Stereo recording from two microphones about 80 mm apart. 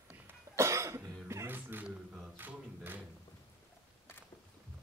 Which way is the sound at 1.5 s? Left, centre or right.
Right.